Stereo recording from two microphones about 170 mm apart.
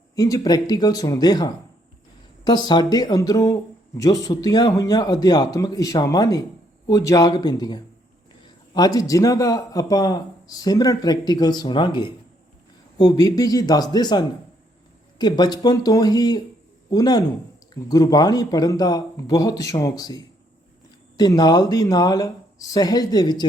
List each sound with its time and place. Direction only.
0.2 s speech: 20° left (ahead or behind)